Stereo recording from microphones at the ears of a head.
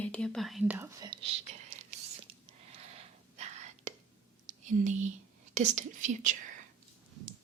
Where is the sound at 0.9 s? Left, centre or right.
Right.